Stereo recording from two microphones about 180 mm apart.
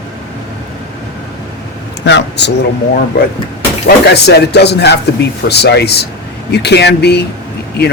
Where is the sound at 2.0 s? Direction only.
75° left (ahead or behind).